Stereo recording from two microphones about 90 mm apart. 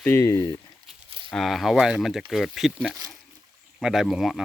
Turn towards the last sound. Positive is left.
turn(degrees=-5)  # may be behind; listen again after turning